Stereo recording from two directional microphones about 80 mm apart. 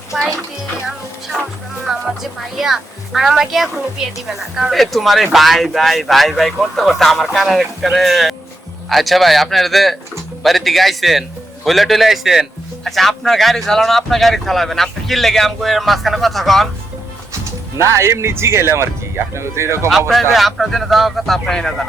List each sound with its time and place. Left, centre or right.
0.9 s music: centre
1.9 s speech: centre
17.7 s speech: right
20.3 s speech: centre